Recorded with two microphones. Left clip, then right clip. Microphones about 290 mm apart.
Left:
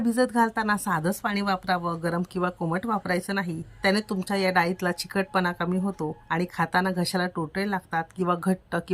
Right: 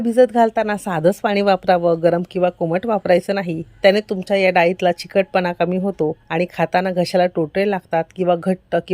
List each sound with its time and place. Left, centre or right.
0.0 s a woman's voice: centre